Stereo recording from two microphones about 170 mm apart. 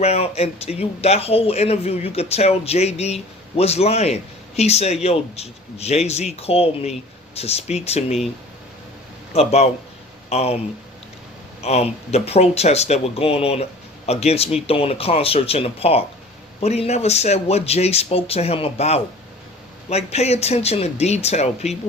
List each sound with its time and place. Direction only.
0.0 s a man's voice: 35° left (ahead or behind)
9.3 s a man's voice: 40° left (ahead or behind)
11.6 s a man's voice: 40° left (ahead or behind)